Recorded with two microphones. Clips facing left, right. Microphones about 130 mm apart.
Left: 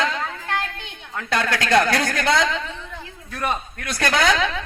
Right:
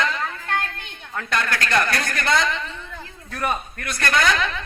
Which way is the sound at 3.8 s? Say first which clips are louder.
Left 2 dB; 90° left.